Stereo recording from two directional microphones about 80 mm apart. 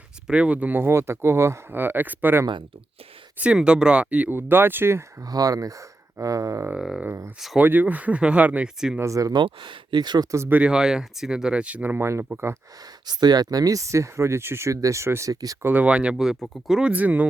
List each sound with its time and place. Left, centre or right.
0.3 s speech: centre
3.4 s speech: centre; by 5.0 s right
5.2 s speech: right
6.7 s speech: centre
7.6 s speech: right
9.0 s speech: right
9.3 s speech: right
10.5 s speech: centre
11.9 s speech: right
13.1 s speech: right
15.3 s speech: right
15.6 s speech: right; by 16.9 s centre
16.9 s speech: centre